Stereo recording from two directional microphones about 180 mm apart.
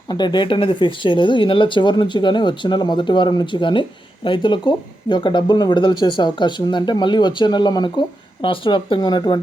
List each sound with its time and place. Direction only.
0.1 s speech: 25° left (ahead or behind)